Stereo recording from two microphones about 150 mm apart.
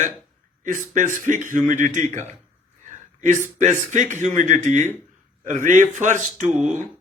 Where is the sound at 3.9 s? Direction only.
50° right (ahead or behind).